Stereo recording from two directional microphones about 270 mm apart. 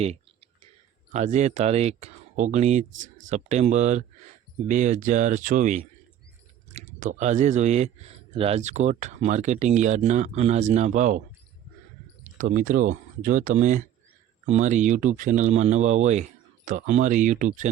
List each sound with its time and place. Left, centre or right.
1.1 s speech: right
2.9 s a sound: right
3.2 s speech: right
12.2 s speech: right